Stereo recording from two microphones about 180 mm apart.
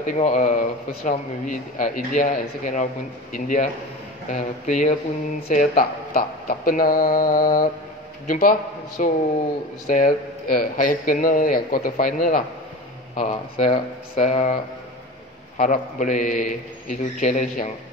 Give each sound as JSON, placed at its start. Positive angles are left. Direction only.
{"t": 0.0, "sound": "speech", "side_deg": 45}